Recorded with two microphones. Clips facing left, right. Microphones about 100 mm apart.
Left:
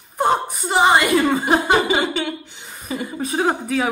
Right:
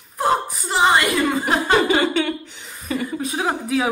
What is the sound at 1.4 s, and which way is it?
Chuckle, 20° left (ahead or behind).